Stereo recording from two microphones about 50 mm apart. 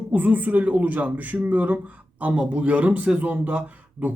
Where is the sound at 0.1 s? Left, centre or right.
Right.